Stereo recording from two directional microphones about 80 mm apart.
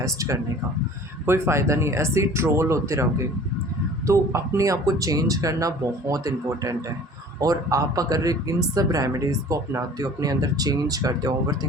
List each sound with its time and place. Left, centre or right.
0.0 s speech: right